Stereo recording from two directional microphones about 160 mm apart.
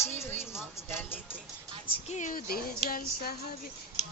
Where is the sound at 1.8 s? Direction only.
45° left (ahead or behind).